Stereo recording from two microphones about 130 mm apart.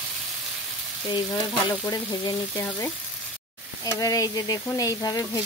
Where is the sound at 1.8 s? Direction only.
25° left (ahead or behind).